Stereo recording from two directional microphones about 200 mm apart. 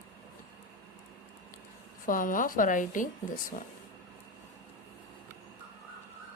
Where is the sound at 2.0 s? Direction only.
45° left (ahead or behind).